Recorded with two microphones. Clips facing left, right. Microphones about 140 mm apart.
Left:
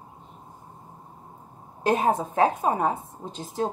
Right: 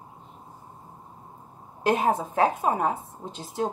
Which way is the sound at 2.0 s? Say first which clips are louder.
Left 2 dB; 40° left (ahead or behind).